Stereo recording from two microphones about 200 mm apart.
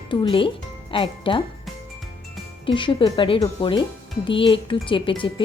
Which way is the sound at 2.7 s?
25° left (ahead or behind).